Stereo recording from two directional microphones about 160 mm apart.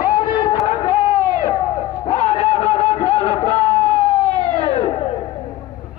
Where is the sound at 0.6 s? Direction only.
40° left (ahead or behind).